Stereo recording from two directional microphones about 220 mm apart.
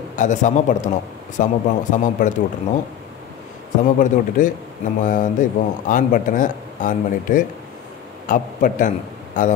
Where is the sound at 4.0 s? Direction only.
35° left (ahead or behind).